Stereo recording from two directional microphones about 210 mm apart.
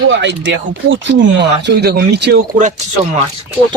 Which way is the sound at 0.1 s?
60° right (ahead or behind).